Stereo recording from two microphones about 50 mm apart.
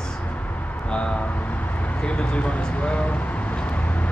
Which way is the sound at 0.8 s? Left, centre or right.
Left.